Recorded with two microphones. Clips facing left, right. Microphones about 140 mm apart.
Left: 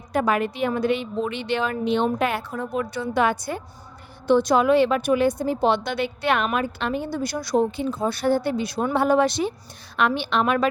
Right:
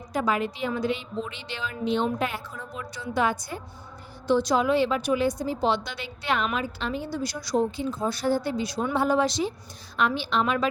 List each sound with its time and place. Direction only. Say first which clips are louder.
0.1 s a woman's voice: left 4 dB; 60° left (ahead or behind)